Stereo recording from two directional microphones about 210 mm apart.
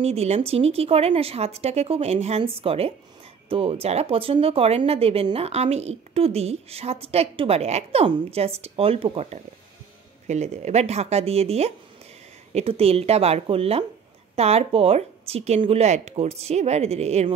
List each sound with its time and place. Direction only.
0.0 s a woman's voice: 30° right (ahead or behind)